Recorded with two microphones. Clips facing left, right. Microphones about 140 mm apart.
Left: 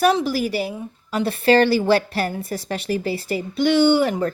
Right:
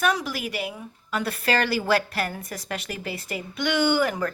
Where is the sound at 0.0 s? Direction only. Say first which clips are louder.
Left 7 dB; 30° left (ahead or behind).